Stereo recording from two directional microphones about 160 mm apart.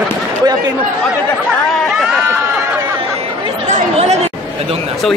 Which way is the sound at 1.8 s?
Centre (ahead or behind).